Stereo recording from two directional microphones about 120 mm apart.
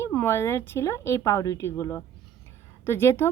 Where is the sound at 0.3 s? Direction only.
20° left (ahead or behind).